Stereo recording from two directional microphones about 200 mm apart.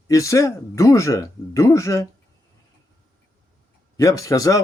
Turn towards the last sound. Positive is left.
turn(degrees=15)  # may be behind; listen again after turning